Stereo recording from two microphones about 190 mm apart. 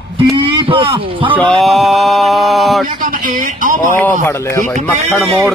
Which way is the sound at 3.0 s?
45° right (ahead or behind).